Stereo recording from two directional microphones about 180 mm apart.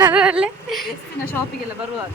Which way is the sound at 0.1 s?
5° right (ahead or behind).